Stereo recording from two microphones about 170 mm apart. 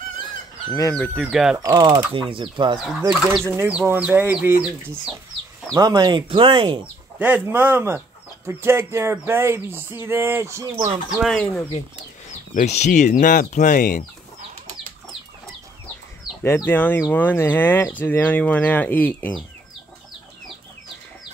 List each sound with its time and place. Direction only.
0.3 s chicken: 20° left (ahead or behind)
0.9 s speech: 5° left (ahead or behind)
1.2 s speech: 5° right (ahead or behind)
1.6 s speech: 25° right (ahead or behind)
3.1 s speech: 5° right (ahead or behind)
3.5 s a sound: 10° right (ahead or behind)
5.8 s speech: 25° right (ahead or behind)
7.2 s a sound: 10° right (ahead or behind)
11.2 s speech: 5° left (ahead or behind)
12.3 s speech: 40° left (ahead or behind)
16.4 s speech: 15° left (ahead or behind)